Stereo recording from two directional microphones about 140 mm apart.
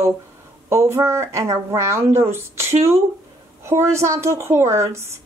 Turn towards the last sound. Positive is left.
turn(degrees=-20)  # may be behind; listen again after turning